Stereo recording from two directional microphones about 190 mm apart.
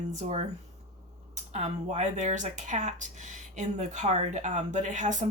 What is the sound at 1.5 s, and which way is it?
Speech, 35° right (ahead or behind).